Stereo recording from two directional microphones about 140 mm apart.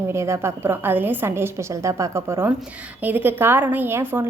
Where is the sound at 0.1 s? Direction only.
20° right (ahead or behind).